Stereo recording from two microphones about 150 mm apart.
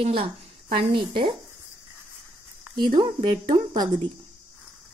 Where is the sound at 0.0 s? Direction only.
40° right (ahead or behind).